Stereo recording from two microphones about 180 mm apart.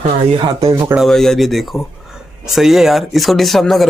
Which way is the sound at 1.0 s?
Centre (ahead or behind).